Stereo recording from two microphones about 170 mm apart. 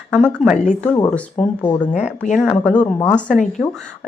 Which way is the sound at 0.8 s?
15° left (ahead or behind).